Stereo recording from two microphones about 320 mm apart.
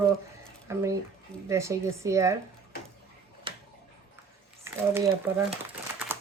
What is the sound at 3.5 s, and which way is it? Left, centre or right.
Tick-tock, centre.